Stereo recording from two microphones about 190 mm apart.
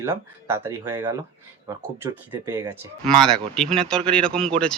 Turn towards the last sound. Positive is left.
turn(degrees=5)  # may be behind; listen again after turning